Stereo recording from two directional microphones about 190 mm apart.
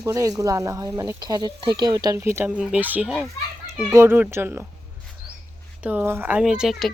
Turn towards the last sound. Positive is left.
turn(degrees=0)  # may be behind; listen again after turning